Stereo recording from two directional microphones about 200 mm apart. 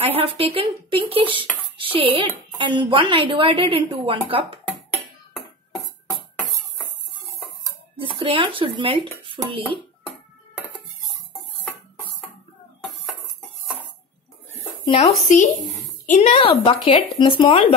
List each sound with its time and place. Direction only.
0.0 s speech: 30° right (ahead or behind)
7.9 s speech: 25° right (ahead or behind)
9.8 s a sound: centre (ahead or behind)
14.9 s speech: 30° left (ahead or behind)